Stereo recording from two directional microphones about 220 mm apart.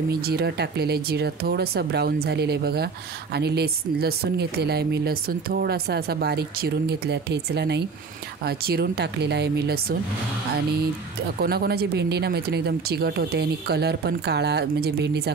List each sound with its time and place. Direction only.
0.3 s speech: 45° right (ahead or behind)
11.4 s speech: 45° right (ahead or behind)